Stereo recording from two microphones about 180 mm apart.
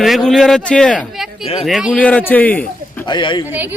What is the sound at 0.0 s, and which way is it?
A man's voice, centre (ahead or behind).